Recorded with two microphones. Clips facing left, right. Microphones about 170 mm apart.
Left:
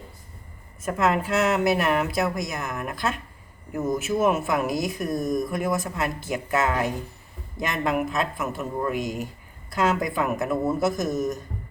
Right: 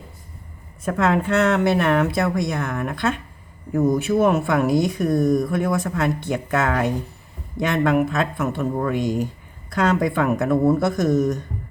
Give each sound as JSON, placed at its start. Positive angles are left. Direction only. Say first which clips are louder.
{"t": 0.9, "sound": "speech", "louder": "right 3 dB", "side_deg": 5}
{"t": 5.2, "sound": "speech", "louder": "right 6 dB", "side_deg": 20}
{"t": 5.5, "sound": "speech", "louder": "right 4 dB", "side_deg": 0}
{"t": 11.0, "sound": "speech", "louder": "right 7 dB", "side_deg": -70}